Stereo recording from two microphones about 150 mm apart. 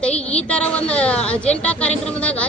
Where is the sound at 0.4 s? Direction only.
10° left (ahead or behind).